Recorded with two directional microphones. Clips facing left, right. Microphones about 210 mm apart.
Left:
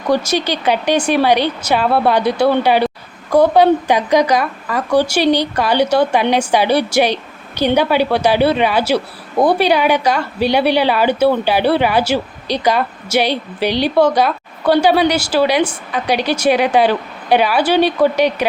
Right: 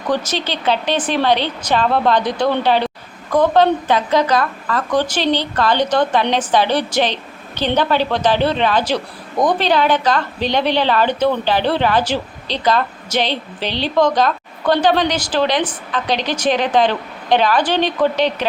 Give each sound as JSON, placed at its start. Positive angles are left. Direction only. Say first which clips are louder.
{"t": 0.1, "sound": "a woman's voice", "louder": "left 4 dB", "side_deg": 10}